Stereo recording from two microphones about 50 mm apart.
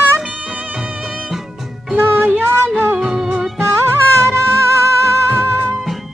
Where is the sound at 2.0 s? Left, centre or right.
Right.